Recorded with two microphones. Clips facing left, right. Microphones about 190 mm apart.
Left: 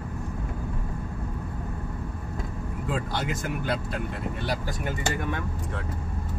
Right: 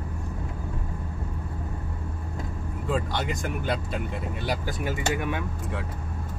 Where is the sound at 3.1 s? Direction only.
Centre (ahead or behind).